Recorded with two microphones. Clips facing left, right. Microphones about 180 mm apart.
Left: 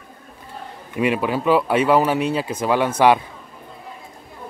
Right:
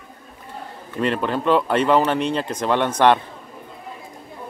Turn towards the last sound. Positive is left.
turn(degrees=10)  # may be behind; listen again after turning